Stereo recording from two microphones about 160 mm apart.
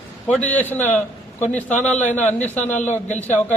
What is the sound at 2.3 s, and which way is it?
Speech, 10° left (ahead or behind).